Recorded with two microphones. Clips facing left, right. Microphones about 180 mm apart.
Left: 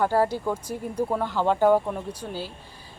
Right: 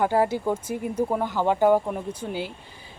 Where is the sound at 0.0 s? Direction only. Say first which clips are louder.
Right 1 dB; 15° right (ahead or behind).